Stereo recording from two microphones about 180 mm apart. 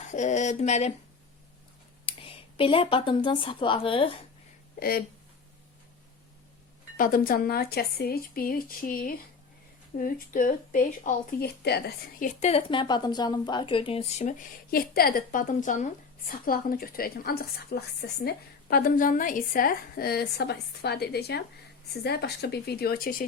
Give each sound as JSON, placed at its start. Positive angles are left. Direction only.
{"t": 0.0, "sound": "speech", "side_deg": 40}
{"t": 2.0, "sound": "speech", "side_deg": 30}
{"t": 4.8, "sound": "speech", "side_deg": 60}
{"t": 6.9, "sound": "a woman's voice", "side_deg": 50}
{"t": 12.4, "sound": "a woman's voice", "side_deg": 35}